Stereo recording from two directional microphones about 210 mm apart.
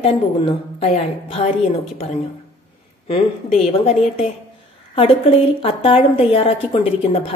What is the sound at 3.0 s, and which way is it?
A woman's voice, 30° left (ahead or behind).